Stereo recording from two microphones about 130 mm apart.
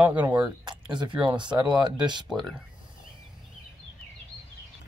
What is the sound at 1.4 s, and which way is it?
Speech, 35° right (ahead or behind).